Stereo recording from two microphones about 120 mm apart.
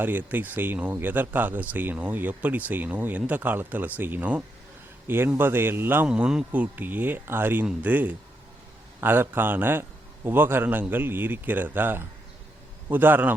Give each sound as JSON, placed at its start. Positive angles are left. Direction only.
{"t": 0.0, "sound": "speech", "side_deg": -15}
{"t": 6.1, "sound": "speech", "side_deg": -5}